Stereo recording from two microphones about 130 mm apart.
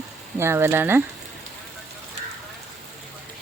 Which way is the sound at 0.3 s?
20° right (ahead or behind).